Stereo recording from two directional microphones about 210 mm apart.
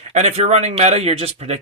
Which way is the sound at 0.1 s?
30° right (ahead or behind).